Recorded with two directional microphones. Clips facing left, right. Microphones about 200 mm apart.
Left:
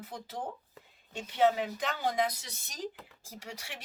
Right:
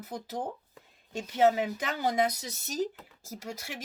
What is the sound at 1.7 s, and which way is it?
Speech, centre (ahead or behind).